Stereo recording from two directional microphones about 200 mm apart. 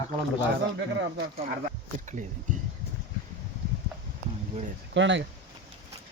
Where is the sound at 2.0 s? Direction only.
40° right (ahead or behind).